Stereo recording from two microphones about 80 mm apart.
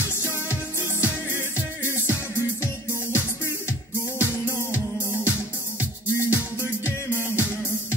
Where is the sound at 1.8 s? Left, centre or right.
Left.